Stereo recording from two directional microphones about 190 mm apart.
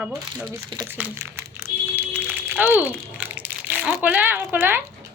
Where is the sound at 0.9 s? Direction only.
10° right (ahead or behind).